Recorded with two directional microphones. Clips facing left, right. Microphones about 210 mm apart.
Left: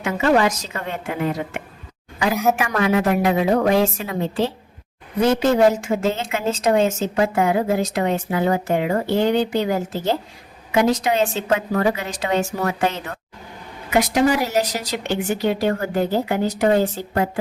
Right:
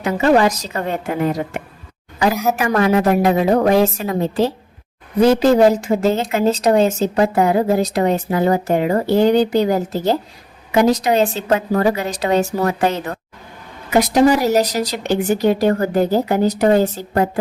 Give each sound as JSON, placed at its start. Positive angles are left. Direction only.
{"t": 0.0, "sound": "a woman's voice", "side_deg": -35}
{"t": 2.3, "sound": "a woman's voice", "side_deg": 0}
{"t": 2.6, "sound": "a woman's voice", "side_deg": -40}